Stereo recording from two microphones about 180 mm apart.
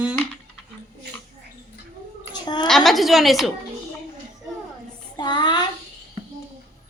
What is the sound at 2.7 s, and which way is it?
Speech, centre (ahead or behind).